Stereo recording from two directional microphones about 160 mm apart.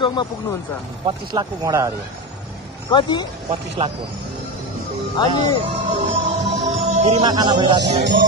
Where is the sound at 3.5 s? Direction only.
35° right (ahead or behind).